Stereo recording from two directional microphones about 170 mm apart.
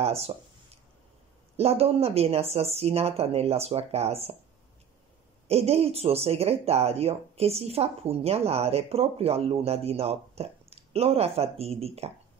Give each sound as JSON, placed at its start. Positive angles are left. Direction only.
{"t": 0.0, "sound": "speech", "side_deg": -35}
{"t": 1.6, "sound": "speech", "side_deg": -35}
{"t": 5.5, "sound": "speech", "side_deg": -35}